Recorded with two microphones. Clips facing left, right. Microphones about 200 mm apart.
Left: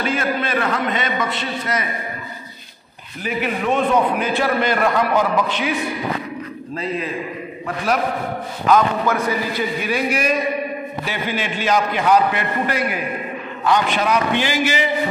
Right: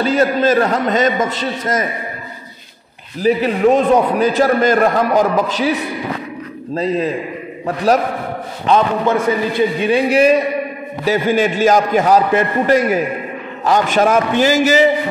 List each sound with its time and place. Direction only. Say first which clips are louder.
0.0 s a man's voice: right 8 dB; 40° right (ahead or behind)
3.2 s a man's voice: right 9 dB; 35° right (ahead or behind)
8.6 s a man's voice: right 2 dB; 25° right (ahead or behind)
11.1 s a man's voice: right 12 dB; 45° right (ahead or behind)